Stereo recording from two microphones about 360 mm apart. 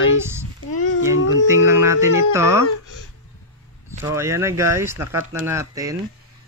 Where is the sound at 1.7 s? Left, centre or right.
Centre.